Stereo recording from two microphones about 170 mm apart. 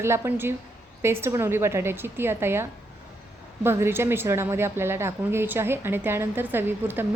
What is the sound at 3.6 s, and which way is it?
A woman's voice, 15° right (ahead or behind).